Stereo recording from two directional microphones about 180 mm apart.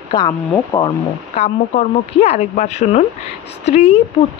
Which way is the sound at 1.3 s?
35° left (ahead or behind).